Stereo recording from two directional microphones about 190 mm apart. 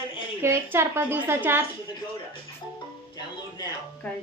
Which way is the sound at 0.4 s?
15° right (ahead or behind).